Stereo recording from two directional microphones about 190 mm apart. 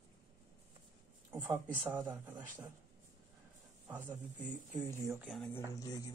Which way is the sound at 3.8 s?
15° right (ahead or behind).